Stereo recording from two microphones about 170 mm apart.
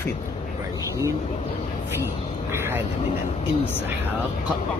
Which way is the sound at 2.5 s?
15° right (ahead or behind).